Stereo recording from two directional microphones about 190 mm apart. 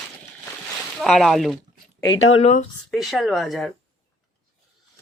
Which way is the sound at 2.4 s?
40° left (ahead or behind).